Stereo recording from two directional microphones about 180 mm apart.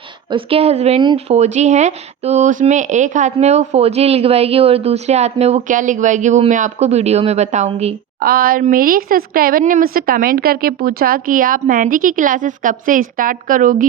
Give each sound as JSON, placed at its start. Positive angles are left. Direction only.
{"t": 0.3, "sound": "speech", "side_deg": -30}
{"t": 8.2, "sound": "a woman's voice", "side_deg": -55}